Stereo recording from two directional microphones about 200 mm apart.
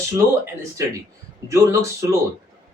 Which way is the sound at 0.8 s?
15° right (ahead or behind).